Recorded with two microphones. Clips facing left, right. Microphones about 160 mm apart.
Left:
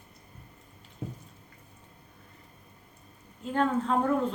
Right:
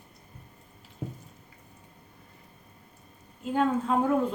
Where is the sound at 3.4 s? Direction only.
10° right (ahead or behind).